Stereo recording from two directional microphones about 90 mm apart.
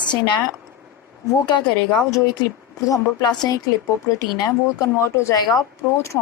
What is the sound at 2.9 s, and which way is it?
Speech, 45° left (ahead or behind).